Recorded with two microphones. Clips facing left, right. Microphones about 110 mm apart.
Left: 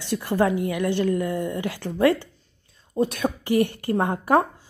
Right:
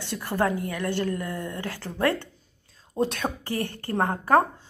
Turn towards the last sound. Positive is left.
turn(degrees=15)  # may be behind; listen again after turning